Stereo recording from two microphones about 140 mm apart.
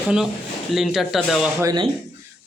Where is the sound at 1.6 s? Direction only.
30° right (ahead or behind).